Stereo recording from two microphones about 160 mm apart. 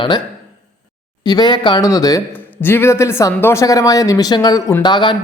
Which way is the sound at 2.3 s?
10° left (ahead or behind).